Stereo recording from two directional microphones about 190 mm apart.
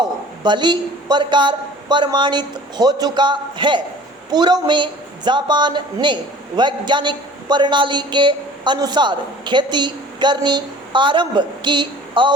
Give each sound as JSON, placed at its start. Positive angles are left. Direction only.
{"t": 0.0, "sound": "a woman's voice", "side_deg": -25}